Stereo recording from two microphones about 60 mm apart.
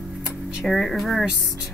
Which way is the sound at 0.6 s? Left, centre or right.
Centre.